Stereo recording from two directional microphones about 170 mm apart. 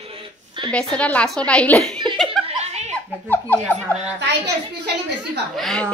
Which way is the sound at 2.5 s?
40° right (ahead or behind).